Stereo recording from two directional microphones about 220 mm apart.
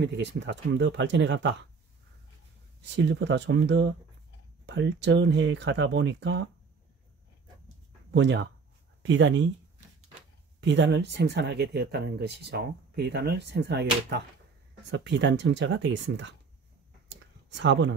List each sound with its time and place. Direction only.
0.0 s speech: 50° right (ahead or behind)
2.8 s speech: 55° right (ahead or behind)
8.1 s speech: 50° right (ahead or behind)
10.6 s speech: 55° right (ahead or behind)
17.1 s clicking: 55° right (ahead or behind)